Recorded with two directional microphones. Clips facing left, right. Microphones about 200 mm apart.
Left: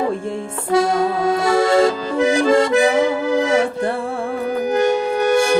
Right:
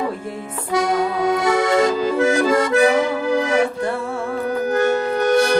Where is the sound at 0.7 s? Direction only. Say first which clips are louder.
Left 3 dB; 30° left (ahead or behind).